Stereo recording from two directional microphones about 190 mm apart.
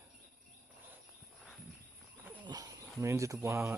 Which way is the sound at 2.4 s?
20° right (ahead or behind).